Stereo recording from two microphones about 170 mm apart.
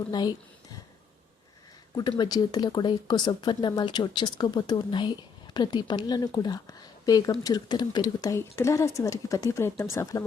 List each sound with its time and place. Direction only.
0.1 s a woman's voice: 25° left (ahead or behind)
2.0 s a woman's voice: 25° left (ahead or behind)